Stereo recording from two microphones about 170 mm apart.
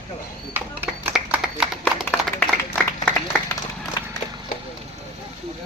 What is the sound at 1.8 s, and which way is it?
Clapping, 5° left (ahead or behind).